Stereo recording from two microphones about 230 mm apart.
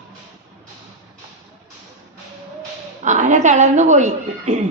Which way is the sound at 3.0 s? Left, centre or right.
Right.